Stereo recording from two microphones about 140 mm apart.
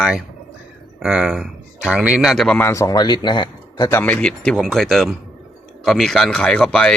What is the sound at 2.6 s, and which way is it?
Speech, 20° left (ahead or behind).